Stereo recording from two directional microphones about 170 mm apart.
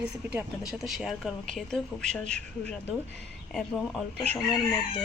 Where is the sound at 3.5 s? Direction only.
Centre (ahead or behind).